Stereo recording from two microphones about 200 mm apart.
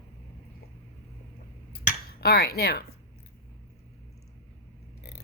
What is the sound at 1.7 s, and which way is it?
Finger snapping, 50° left (ahead or behind).